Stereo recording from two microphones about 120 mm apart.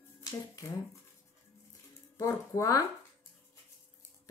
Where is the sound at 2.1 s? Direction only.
25° left (ahead or behind).